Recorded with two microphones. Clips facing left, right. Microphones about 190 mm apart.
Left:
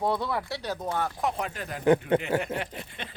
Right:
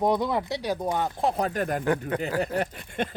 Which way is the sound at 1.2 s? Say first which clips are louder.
Right 5 dB; 40° right (ahead or behind).